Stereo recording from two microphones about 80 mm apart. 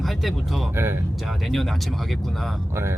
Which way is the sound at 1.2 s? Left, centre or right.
Centre.